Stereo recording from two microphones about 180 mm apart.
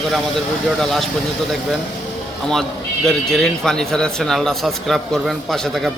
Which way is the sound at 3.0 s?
5° left (ahead or behind).